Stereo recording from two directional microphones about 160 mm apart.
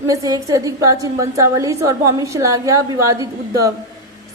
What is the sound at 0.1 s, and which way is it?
A woman's voice, 20° right (ahead or behind).